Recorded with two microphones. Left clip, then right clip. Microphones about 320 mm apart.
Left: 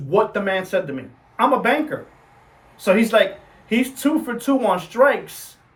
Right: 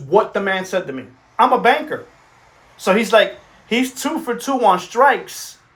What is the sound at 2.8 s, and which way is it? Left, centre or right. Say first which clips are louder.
Speech: right 2 dB; centre.